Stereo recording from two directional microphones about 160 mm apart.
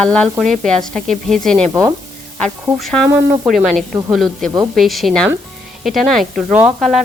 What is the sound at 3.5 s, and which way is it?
A woman's voice, centre (ahead or behind).